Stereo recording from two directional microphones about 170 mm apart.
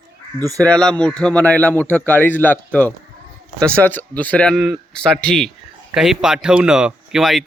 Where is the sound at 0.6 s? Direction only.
5° left (ahead or behind).